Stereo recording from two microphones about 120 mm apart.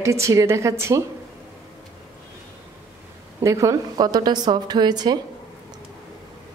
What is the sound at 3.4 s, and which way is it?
A woman's voice, 25° right (ahead or behind).